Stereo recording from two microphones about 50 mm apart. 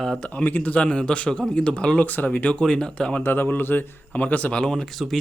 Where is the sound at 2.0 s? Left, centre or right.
Left.